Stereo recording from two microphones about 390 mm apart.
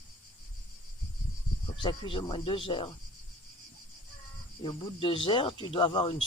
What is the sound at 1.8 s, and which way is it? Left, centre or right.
Speech, centre.